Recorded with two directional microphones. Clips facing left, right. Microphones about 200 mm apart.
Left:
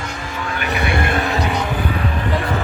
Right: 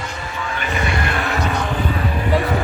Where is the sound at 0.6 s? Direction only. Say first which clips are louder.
Left 2 dB; 65° left (ahead or behind).